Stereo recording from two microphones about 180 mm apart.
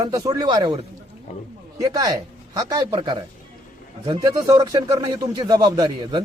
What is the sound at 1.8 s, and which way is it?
Speech, 20° right (ahead or behind).